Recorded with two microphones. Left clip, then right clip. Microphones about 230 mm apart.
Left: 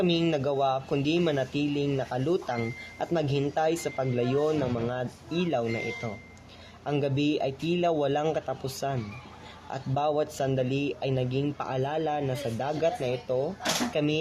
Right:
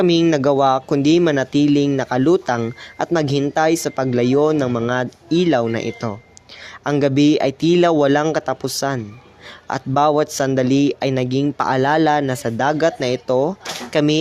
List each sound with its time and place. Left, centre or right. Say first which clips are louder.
0.0 s speech: right 11 dB; right